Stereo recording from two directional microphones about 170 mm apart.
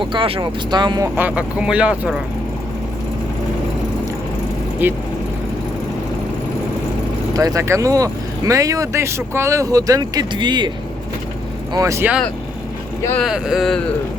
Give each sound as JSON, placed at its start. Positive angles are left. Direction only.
{"t": 0.0, "sound": "speech", "side_deg": -30}
{"t": 1.1, "sound": "speech", "side_deg": -10}
{"t": 4.8, "sound": "speech", "side_deg": -10}
{"t": 7.3, "sound": "speech", "side_deg": -20}
{"t": 11.7, "sound": "speech", "side_deg": -20}
{"t": 13.1, "sound": "speech", "side_deg": 0}